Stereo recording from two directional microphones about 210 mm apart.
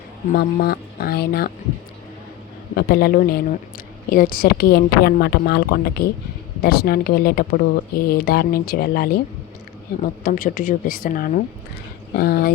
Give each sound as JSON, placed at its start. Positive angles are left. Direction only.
{"t": 0.3, "sound": "speech", "side_deg": 45}
{"t": 2.7, "sound": "a woman's voice", "side_deg": 45}